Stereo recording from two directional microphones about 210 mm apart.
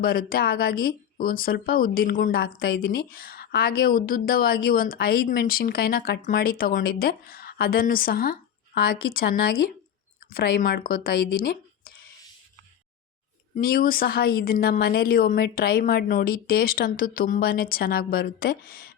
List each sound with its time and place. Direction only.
0.0 s speech: 45° left (ahead or behind)
13.6 s speech: 45° left (ahead or behind)